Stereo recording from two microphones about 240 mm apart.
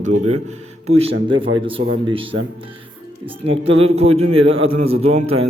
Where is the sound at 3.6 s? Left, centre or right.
Right.